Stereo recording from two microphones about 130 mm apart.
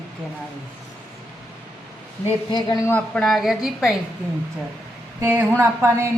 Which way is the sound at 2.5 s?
35° left (ahead or behind).